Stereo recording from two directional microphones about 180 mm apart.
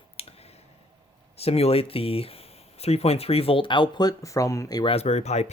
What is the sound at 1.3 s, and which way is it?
Speech, 35° left (ahead or behind).